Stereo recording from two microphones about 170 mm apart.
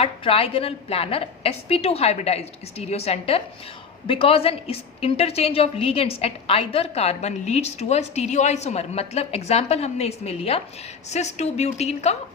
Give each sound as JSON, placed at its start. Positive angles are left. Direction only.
{"t": 0.0, "sound": "a woman's voice", "side_deg": 35}